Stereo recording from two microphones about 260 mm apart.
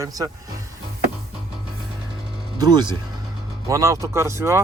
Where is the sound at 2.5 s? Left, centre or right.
Centre.